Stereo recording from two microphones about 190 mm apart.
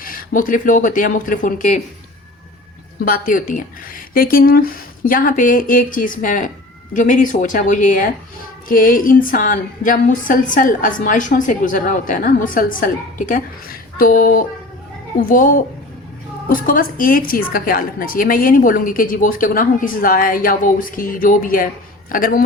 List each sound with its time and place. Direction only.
0.0 s a woman's voice: 50° left (ahead or behind)
3.0 s a woman's voice: 45° left (ahead or behind)